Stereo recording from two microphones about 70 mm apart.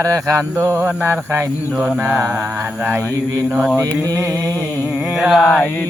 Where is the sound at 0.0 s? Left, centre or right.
Right.